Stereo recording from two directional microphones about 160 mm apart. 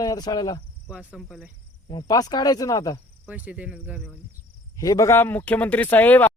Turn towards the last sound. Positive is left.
turn(degrees=10)  # may be behind; listen again after turning